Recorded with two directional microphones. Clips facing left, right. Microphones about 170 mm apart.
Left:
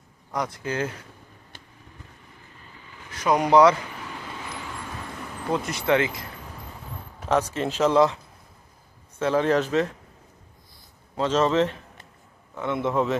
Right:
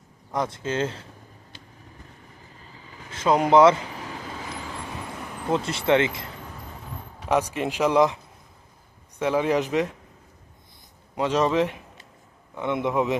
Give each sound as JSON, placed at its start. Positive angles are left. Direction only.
{"t": 0.3, "sound": "speech", "side_deg": -25}
{"t": 3.1, "sound": "speech", "side_deg": -25}
{"t": 5.5, "sound": "speech", "side_deg": -25}
{"t": 7.3, "sound": "speech", "side_deg": -15}
{"t": 11.1, "sound": "speech", "side_deg": -15}